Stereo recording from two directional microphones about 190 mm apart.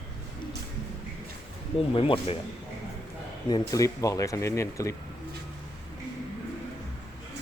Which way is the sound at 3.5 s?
20° left (ahead or behind).